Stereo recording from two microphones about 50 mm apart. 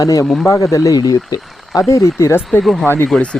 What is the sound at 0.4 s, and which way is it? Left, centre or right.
Speech, left.